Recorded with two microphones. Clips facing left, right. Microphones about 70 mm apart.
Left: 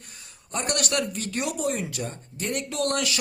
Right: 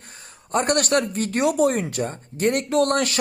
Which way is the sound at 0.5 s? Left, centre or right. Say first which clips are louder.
Right 7 dB; right.